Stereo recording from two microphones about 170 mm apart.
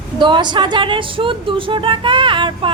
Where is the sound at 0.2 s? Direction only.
30° right (ahead or behind).